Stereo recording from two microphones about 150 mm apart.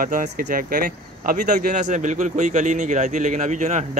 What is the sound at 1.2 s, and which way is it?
A man's voice, 55° right (ahead or behind).